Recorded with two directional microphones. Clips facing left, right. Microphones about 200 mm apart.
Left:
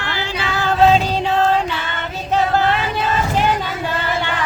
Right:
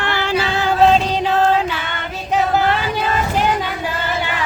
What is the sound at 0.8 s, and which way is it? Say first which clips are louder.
Music: even; centre (ahead or behind).